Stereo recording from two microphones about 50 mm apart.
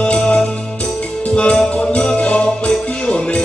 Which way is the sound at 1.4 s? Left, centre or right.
Left.